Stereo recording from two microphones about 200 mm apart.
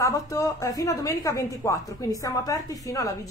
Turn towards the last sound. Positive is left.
turn(degrees=15)  # may be behind; listen again after turning